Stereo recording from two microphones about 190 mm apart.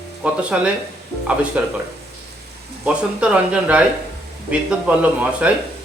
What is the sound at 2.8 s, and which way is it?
Speech, 5° right (ahead or behind).